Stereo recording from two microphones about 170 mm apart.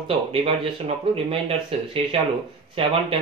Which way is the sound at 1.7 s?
35° right (ahead or behind).